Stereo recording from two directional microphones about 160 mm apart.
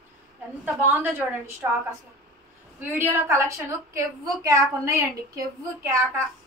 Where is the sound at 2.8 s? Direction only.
15° right (ahead or behind).